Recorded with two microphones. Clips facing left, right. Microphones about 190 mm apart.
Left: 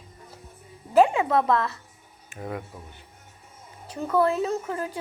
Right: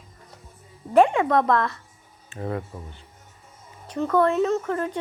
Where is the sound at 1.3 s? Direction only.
5° left (ahead or behind).